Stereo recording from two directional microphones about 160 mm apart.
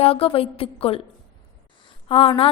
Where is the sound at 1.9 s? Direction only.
35° left (ahead or behind).